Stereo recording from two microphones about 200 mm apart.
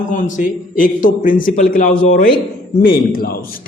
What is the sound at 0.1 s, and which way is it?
A man's voice, 40° left (ahead or behind).